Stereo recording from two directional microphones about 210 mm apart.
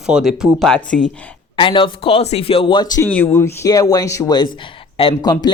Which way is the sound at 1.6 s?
25° left (ahead or behind).